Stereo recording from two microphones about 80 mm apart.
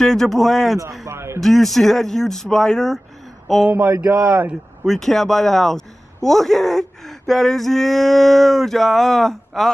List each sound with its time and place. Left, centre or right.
0.0 s a man's voice: centre
1.0 s speech: right
1.4 s a man's voice: centre
3.7 s speech: right
4.8 s a man's voice: centre